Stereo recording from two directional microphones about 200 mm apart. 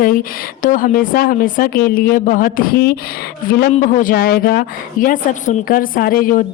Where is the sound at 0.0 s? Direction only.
45° left (ahead or behind).